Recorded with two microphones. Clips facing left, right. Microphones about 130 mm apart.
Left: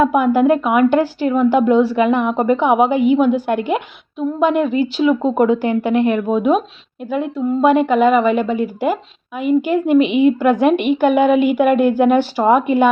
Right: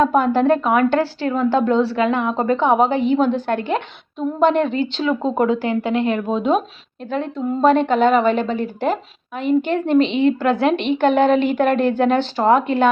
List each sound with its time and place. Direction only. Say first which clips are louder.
0.0 s a woman's voice: left 2 dB; 10° left (ahead or behind)